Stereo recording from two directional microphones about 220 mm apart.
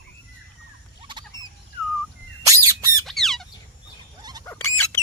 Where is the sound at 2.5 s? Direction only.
15° right (ahead or behind).